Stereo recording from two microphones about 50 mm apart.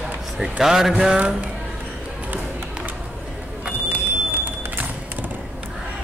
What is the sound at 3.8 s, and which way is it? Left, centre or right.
Music, right.